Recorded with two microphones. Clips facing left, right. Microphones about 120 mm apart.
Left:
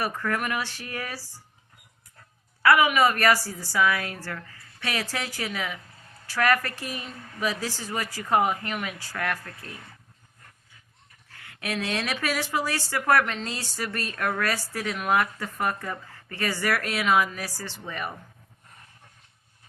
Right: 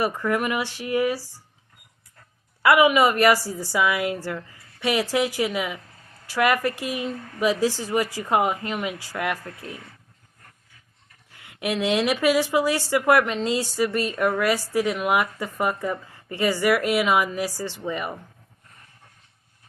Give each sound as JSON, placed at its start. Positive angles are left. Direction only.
{"t": 0.0, "sound": "speech", "side_deg": -15}
{"t": 2.6, "sound": "a woman's voice", "side_deg": -20}
{"t": 11.3, "sound": "speech", "side_deg": -15}